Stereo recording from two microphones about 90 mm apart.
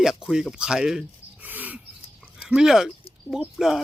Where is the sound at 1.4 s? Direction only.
20° right (ahead or behind).